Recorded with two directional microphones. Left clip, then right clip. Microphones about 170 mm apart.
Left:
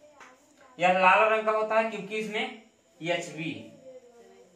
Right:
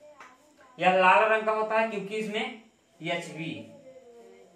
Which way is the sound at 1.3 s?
25° right (ahead or behind).